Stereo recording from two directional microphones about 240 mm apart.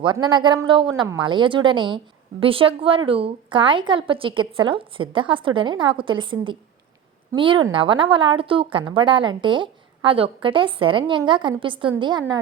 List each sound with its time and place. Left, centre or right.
0.0 s a woman's voice: centre